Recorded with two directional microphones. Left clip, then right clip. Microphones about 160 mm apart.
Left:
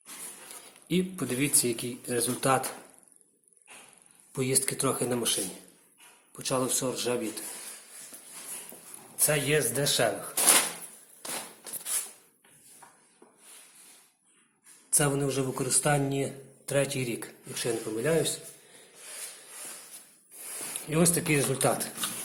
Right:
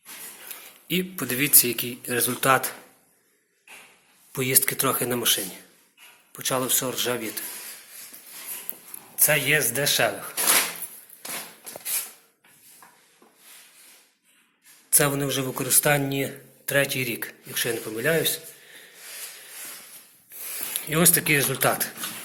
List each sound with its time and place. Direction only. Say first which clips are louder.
0.9 s speech: right 3 dB; 15° left (ahead or behind)
4.3 s speech: right 4 dB; centre (ahead or behind)
9.2 s speech: right 5 dB; 5° left (ahead or behind)
14.8 s a man's voice: right 4 dB; centre (ahead or behind)
20.7 s speech: right 4 dB; 5° left (ahead or behind)